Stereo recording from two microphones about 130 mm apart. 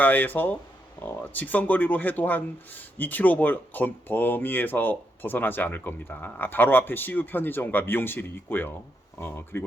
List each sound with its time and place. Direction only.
0.0 s speech: 15° left (ahead or behind)